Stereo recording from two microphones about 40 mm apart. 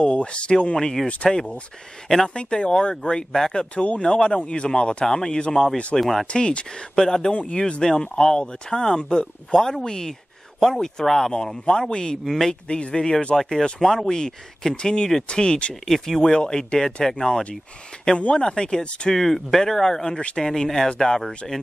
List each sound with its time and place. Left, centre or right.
0.0 s speech: left
2.0 s speech: centre
2.3 s speech: left
3.7 s speech: left
5.9 s speech: centre
6.2 s speech: left
12.6 s speech: left
15.7 s speech: centre
16.3 s speech: centre
18.1 s speech: left
19.1 s speech: centre
20.2 s speech: left
20.4 s speech: centre